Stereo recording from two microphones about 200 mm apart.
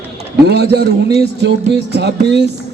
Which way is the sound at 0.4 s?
55° right (ahead or behind).